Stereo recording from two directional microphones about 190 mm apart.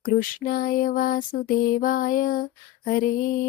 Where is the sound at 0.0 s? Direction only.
50° left (ahead or behind).